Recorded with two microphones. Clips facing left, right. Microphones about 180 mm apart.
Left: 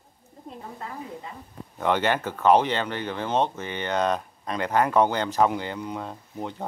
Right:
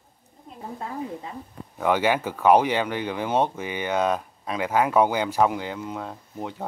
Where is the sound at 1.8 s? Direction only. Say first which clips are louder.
Right 2 dB; 10° right (ahead or behind).